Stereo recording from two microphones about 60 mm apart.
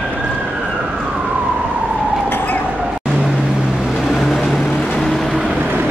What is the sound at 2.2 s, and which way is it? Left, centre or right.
Vehicle, left.